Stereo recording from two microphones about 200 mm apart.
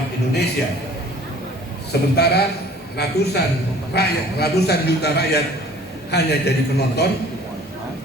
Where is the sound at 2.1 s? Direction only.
50° left (ahead or behind).